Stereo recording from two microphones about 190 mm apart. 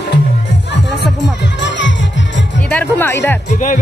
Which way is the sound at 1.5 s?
70° left (ahead or behind).